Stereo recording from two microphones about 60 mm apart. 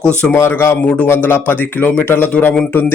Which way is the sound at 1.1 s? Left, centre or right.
Left.